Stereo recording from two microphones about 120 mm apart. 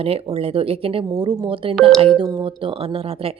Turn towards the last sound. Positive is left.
turn(degrees=-50)  # may be behind; listen again after turning